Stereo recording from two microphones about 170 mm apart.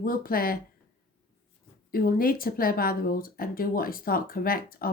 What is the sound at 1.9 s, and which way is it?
Speech, 60° left (ahead or behind).